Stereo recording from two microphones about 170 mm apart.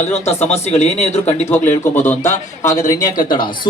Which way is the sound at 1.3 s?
15° left (ahead or behind).